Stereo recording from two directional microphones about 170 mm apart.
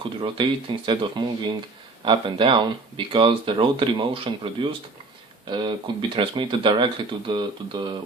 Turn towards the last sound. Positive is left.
turn(degrees=-25)  # may be behind; listen again after turning